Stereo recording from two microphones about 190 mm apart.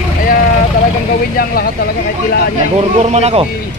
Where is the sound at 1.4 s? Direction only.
45° left (ahead or behind).